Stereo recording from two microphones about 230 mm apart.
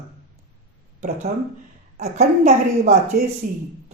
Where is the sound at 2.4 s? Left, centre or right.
Right.